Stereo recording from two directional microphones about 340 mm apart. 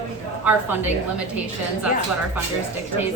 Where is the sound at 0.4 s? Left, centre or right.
Centre.